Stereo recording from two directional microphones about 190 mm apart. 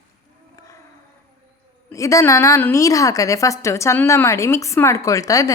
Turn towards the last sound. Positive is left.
turn(degrees=20)  # may be behind; listen again after turning